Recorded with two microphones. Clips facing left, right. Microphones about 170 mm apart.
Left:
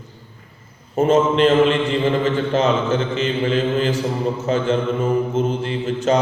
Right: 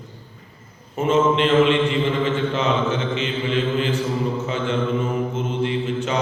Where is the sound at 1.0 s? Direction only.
40° left (ahead or behind).